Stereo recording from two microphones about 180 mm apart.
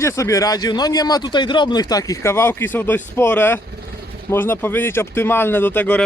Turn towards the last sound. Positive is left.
turn(degrees=10)  # may be behind; listen again after turning